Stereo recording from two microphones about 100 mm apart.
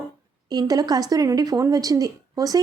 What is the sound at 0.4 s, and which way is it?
A woman's voice, 40° right (ahead or behind).